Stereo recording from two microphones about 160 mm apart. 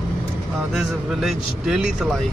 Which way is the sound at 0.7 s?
Centre (ahead or behind).